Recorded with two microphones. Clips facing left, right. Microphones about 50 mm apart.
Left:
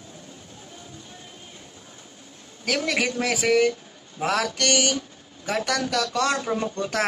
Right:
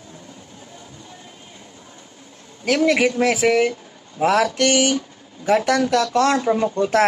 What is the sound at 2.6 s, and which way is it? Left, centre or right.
Speech, centre.